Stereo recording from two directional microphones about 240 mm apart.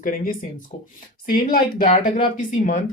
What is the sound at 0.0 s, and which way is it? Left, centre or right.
Speech, left.